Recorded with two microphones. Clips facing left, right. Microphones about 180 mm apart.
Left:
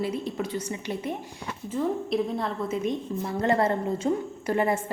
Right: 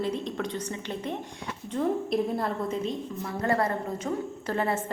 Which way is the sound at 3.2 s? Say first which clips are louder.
Left 3 dB; 25° left (ahead or behind).